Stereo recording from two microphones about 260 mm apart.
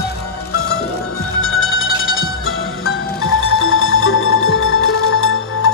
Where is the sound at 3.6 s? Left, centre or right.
Left.